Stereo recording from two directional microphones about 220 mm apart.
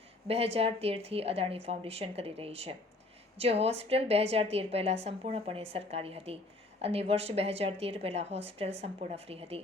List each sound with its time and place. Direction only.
0.3 s a woman's voice: 25° right (ahead or behind)